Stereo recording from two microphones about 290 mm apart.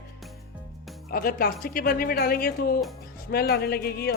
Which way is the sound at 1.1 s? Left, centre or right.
Left.